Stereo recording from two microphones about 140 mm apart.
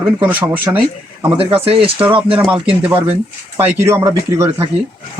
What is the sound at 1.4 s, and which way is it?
Speech, 40° right (ahead or behind).